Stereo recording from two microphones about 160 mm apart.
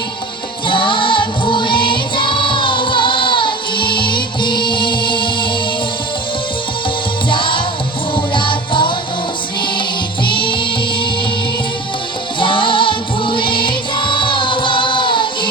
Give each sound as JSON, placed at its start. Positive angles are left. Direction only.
{"t": 0.7, "sound": "music", "side_deg": 30}
{"t": 7.3, "sound": "music", "side_deg": 30}
{"t": 10.2, "sound": "music", "side_deg": 30}
{"t": 12.4, "sound": "music", "side_deg": 30}